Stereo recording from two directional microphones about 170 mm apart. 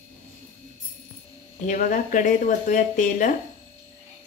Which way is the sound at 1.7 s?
50° left (ahead or behind).